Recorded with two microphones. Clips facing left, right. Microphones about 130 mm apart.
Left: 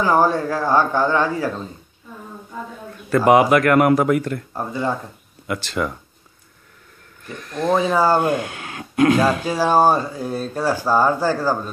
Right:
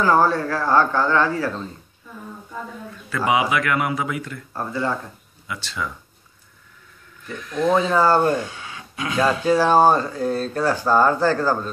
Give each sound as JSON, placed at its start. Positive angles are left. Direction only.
{"t": 0.0, "sound": "speech", "side_deg": 15}
{"t": 3.1, "sound": "a man's voice", "side_deg": 45}
{"t": 4.6, "sound": "speech", "side_deg": 15}
{"t": 5.5, "sound": "speech", "side_deg": 55}
{"t": 7.4, "sound": "speech", "side_deg": 40}
{"t": 7.7, "sound": "speech", "side_deg": 10}
{"t": 8.4, "sound": "speech", "side_deg": 65}
{"t": 9.4, "sound": "speech", "side_deg": 10}